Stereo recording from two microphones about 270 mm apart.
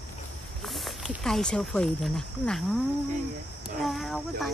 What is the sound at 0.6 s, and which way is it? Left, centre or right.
Speech, centre.